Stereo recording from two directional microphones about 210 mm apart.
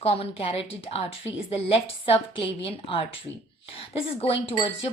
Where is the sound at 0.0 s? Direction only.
30° left (ahead or behind).